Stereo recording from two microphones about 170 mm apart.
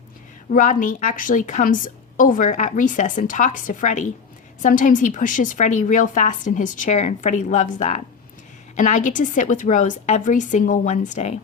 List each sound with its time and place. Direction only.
0.5 s a woman's voice: 50° left (ahead or behind)